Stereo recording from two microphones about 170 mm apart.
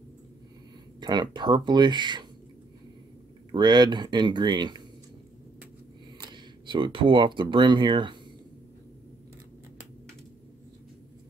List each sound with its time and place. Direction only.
1.0 s speech: 25° right (ahead or behind)
3.5 s speech: 25° right (ahead or behind)
6.2 s speech: 25° right (ahead or behind)